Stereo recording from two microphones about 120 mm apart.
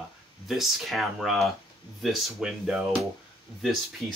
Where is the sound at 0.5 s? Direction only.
Centre (ahead or behind).